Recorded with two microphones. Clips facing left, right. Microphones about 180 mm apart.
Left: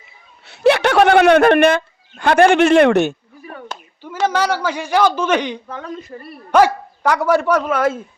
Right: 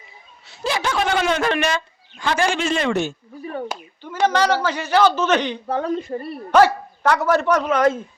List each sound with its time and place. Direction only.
0.4 s speech: 65° left (ahead or behind)
3.7 s a sound: 10° right (ahead or behind)
4.3 s speech: 10° left (ahead or behind)
5.6 s speech: 35° right (ahead or behind)
6.5 s speech: 10° left (ahead or behind)